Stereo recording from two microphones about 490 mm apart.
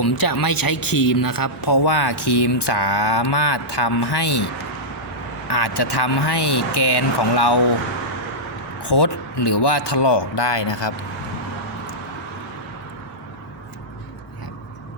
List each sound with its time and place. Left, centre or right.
0.0 s speech: left
5.5 s speech: left
8.8 s speech: left